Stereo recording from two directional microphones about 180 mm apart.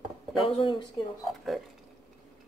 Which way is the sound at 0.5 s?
30° left (ahead or behind).